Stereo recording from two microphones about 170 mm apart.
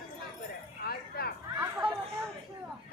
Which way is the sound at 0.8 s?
65° left (ahead or behind).